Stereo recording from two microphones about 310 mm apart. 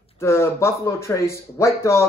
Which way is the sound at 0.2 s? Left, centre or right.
Centre.